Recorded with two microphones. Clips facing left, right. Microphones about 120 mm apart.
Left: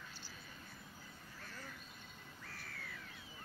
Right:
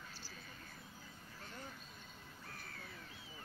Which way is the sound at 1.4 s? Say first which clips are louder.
Right 2 dB; 25° right (ahead or behind).